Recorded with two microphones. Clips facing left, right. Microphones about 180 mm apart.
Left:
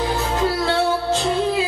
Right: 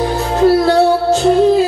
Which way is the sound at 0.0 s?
40° right (ahead or behind).